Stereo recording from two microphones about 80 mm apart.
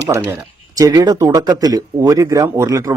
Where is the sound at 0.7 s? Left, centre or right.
Right.